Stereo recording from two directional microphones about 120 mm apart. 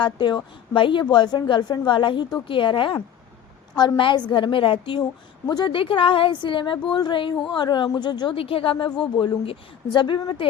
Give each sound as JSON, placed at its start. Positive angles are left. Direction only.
{"t": 0.0, "sound": "a woman's voice", "side_deg": 40}
{"t": 8.4, "sound": "a woman's voice", "side_deg": 50}
{"t": 8.8, "sound": "a woman's voice", "side_deg": 40}